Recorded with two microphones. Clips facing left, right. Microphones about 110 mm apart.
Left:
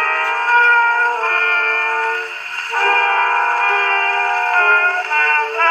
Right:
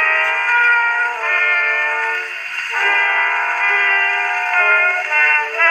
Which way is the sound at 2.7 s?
25° left (ahead or behind).